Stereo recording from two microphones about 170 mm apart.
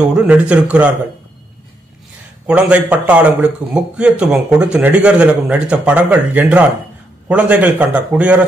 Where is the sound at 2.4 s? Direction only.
5° right (ahead or behind).